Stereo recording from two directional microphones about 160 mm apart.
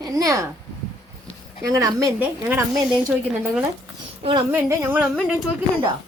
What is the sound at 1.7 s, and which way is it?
A woman's voice, 20° right (ahead or behind).